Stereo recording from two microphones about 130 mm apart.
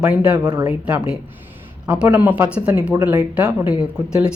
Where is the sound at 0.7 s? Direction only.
10° right (ahead or behind).